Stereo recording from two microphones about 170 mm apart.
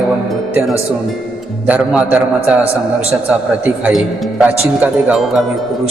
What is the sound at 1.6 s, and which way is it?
Speech, 5° right (ahead or behind).